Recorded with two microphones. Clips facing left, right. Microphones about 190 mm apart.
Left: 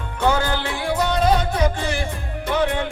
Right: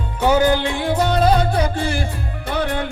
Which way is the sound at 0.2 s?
10° right (ahead or behind).